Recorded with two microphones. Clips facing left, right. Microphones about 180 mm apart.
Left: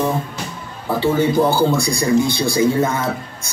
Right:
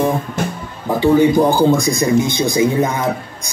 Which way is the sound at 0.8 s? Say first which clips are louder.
Right 5 dB; 15° right (ahead or behind).